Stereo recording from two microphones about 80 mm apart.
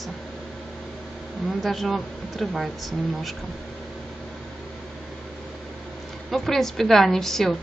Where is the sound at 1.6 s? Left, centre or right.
Centre.